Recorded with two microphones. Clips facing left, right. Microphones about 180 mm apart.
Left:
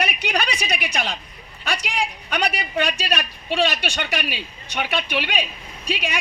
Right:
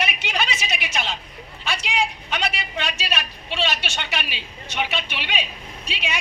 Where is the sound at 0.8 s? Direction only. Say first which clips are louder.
Left 2 dB; 55° left (ahead or behind).